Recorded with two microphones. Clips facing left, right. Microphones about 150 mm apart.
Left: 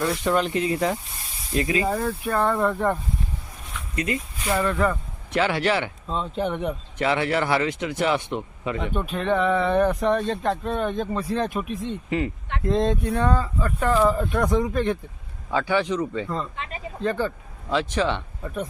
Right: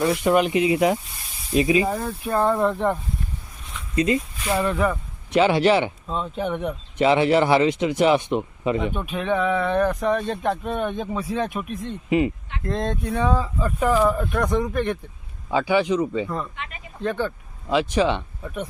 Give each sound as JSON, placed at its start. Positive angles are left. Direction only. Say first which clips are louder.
{"t": 0.0, "sound": "a man's voice", "louder": "right 4 dB", "side_deg": -15}
{"t": 3.9, "sound": "speech", "louder": "right 6 dB", "side_deg": -25}
{"t": 4.4, "sound": "a man's voice", "louder": "even", "side_deg": -15}
{"t": 6.1, "sound": "a man's voice", "louder": "even", "side_deg": -5}
{"t": 7.0, "sound": "a man's voice", "louder": "right 6 dB", "side_deg": -20}
{"t": 15.4, "sound": "a man's voice", "louder": "right 3 dB", "side_deg": -15}
{"t": 17.0, "sound": "speech", "louder": "even", "side_deg": 0}
{"t": 17.9, "sound": "a man's voice", "louder": "right 4 dB", "side_deg": -15}
{"t": 18.4, "sound": "speech", "louder": "left 2 dB", "side_deg": 0}